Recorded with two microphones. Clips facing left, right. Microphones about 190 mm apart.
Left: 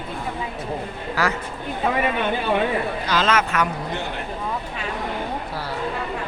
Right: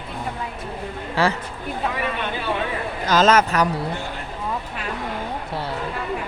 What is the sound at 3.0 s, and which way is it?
Speech, 45° right (ahead or behind).